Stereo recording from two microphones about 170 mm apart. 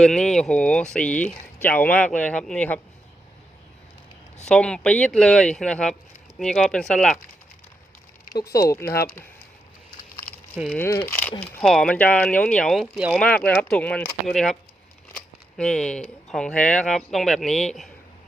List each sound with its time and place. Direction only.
0.0 s speech: 5° left (ahead or behind)
4.4 s speech: 5° left (ahead or behind)
8.7 s speech: 15° left (ahead or behind)
10.2 s a sound: 60° left (ahead or behind)
10.8 s speech: 15° left (ahead or behind)
15.5 s speech: 5° left (ahead or behind)